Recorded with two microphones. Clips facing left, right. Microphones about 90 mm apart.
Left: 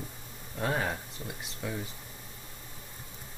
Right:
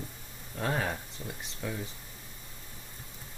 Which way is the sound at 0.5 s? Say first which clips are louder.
Left 1 dB; centre (ahead or behind).